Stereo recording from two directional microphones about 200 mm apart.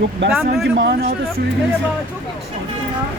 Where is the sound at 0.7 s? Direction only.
60° right (ahead or behind).